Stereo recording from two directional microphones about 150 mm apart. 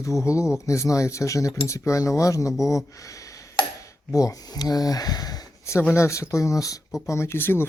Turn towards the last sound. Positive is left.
turn(degrees=15)  # may be behind; listen again after turning